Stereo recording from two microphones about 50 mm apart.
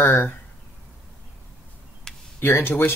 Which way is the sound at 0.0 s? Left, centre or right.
Left.